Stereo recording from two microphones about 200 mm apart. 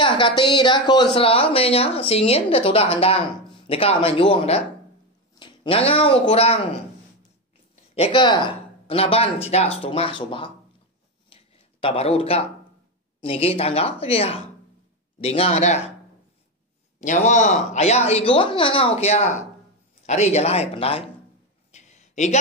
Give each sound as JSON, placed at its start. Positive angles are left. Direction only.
{"t": 0.4, "sound": "a woman's voice", "side_deg": 25}
{"t": 7.9, "sound": "a woman's voice", "side_deg": 25}
{"t": 11.2, "sound": "a sound", "side_deg": 25}
{"t": 13.2, "sound": "a woman's voice", "side_deg": 30}
{"t": 17.0, "sound": "speech", "side_deg": 40}
{"t": 21.7, "sound": "a sound", "side_deg": 35}